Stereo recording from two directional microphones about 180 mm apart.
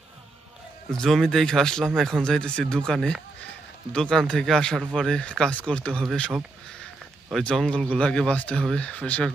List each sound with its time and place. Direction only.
0.9 s speech: 5° left (ahead or behind)